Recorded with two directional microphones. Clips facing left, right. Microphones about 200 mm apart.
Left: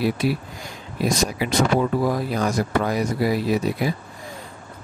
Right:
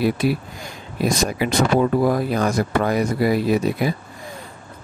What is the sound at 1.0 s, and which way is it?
Speech, 55° right (ahead or behind).